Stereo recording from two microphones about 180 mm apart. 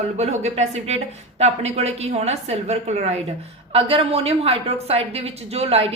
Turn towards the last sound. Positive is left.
turn(degrees=-35)  # may be behind; listen again after turning